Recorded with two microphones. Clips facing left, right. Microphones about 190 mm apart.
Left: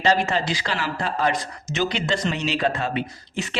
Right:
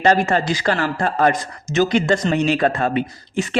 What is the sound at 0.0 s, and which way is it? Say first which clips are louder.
Speech: right 5 dB; 50° right (ahead or behind).